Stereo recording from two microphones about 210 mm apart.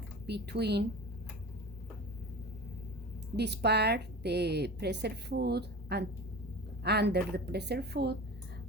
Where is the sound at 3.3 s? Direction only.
50° right (ahead or behind).